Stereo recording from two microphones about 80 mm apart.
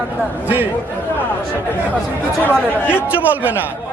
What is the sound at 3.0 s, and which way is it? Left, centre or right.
Speech, right.